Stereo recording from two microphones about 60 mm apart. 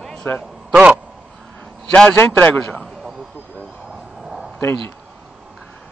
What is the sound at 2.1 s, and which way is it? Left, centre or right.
Speech, left.